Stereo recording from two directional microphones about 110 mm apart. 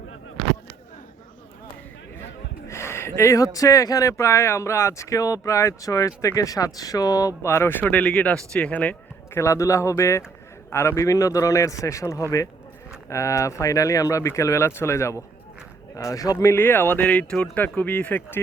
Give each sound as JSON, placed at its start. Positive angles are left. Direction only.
{"t": 2.6, "sound": "speech", "side_deg": 25}
{"t": 9.4, "sound": "speech", "side_deg": 30}